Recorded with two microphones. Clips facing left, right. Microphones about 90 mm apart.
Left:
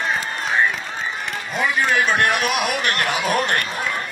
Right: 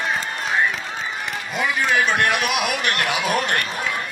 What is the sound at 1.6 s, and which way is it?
A man's voice, 45° left (ahead or behind).